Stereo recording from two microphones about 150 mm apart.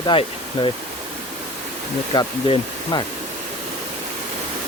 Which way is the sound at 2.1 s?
30° left (ahead or behind).